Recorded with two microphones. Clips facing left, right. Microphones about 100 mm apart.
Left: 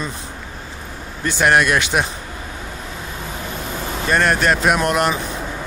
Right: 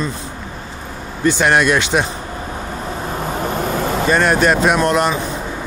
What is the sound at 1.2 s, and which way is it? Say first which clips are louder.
Speech: right 2 dB; centre (ahead or behind).